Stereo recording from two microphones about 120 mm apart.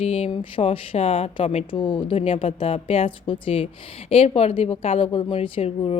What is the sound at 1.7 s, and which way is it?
A woman's voice, 40° left (ahead or behind).